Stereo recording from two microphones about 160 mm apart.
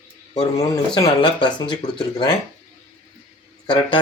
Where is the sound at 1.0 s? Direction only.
30° left (ahead or behind).